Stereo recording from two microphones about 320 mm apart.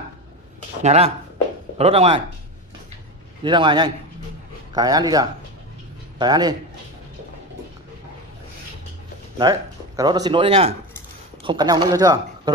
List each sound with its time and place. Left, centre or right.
0.8 s speech: centre
3.4 s speech: centre
9.4 s speech: centre